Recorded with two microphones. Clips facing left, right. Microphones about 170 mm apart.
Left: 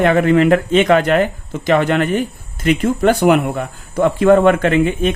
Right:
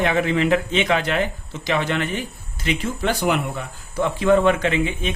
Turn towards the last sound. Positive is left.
turn(degrees=50)  # may be behind; listen again after turning